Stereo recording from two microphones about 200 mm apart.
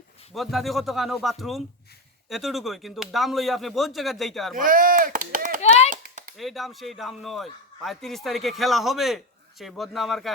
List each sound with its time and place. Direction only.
0.3 s a man's voice: centre (ahead or behind)
4.5 s speech: 40° right (ahead or behind)
5.9 s a sound: 40° right (ahead or behind)
6.3 s a man's voice: centre (ahead or behind)